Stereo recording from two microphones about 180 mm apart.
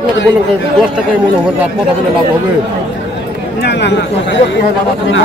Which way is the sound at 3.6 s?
70° left (ahead or behind).